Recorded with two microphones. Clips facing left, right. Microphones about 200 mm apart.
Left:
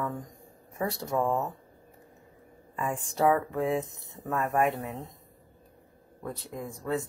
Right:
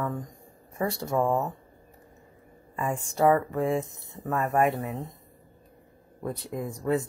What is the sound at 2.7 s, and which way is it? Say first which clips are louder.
Speech: right 2 dB; centre (ahead or behind).